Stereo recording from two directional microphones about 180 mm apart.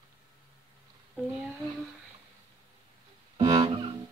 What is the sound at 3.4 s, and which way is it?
Music, 25° right (ahead or behind).